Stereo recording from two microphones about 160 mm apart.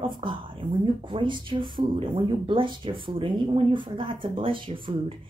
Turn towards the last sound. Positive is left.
turn(degrees=-30)  # may be behind; listen again after turning